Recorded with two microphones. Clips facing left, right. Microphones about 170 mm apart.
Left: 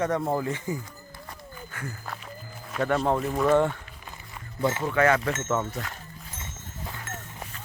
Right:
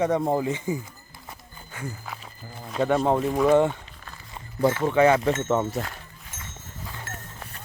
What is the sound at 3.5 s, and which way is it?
Music, 15° right (ahead or behind).